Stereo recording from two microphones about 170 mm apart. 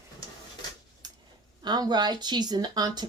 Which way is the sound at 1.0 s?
25° right (ahead or behind).